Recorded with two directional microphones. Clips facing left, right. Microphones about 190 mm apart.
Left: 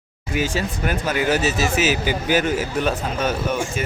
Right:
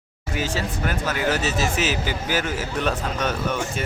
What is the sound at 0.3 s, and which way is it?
Speech, 15° left (ahead or behind).